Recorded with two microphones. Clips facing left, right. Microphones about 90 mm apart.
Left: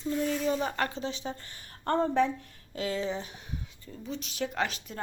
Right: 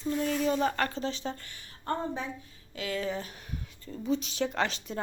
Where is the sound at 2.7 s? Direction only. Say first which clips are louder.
Left 2 dB; 35° left (ahead or behind).